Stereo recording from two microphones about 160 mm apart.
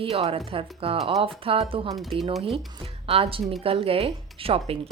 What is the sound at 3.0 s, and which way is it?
Speech, 35° right (ahead or behind).